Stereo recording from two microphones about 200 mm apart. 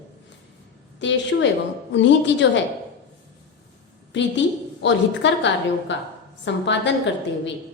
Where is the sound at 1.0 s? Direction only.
65° left (ahead or behind).